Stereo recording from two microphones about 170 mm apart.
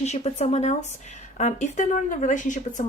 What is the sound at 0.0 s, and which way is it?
Speech, 40° left (ahead or behind).